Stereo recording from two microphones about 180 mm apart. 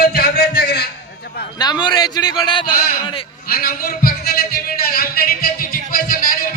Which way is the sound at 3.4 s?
55° left (ahead or behind).